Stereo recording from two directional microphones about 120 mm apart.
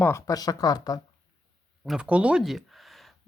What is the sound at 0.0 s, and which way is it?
Speech, 25° left (ahead or behind).